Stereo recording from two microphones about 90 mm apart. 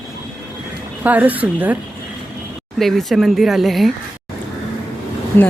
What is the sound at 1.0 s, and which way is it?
Speech, 20° right (ahead or behind).